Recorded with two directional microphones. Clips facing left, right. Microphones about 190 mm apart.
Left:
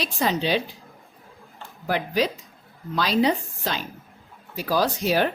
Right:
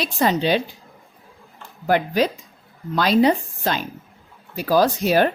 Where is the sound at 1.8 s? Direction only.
50° right (ahead or behind).